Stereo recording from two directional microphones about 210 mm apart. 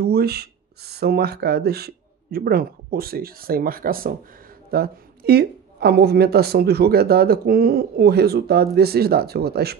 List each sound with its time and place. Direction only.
0.0 s speech: 50° right (ahead or behind)